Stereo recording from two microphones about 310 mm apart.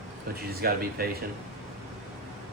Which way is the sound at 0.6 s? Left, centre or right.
Right.